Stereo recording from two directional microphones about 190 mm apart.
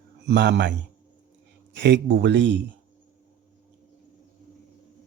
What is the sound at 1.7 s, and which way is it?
Speech, 65° right (ahead or behind).